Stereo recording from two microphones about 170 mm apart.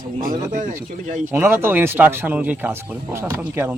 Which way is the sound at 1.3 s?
15° right (ahead or behind).